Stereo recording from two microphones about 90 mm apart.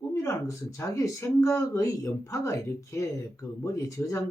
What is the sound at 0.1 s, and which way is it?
Speech, 35° left (ahead or behind).